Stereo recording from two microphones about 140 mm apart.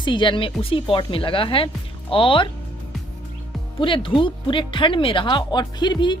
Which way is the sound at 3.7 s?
40° left (ahead or behind).